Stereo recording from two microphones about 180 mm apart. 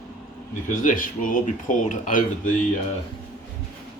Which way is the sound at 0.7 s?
50° left (ahead or behind).